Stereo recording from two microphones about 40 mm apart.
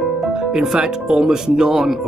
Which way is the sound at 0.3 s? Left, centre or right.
Centre.